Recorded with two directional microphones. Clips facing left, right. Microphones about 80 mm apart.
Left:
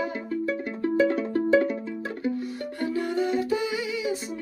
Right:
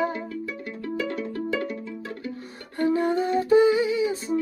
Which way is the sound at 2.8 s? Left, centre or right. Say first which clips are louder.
Right 5 dB; right.